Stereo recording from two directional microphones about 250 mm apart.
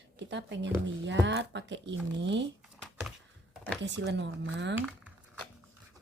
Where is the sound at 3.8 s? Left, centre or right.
Right.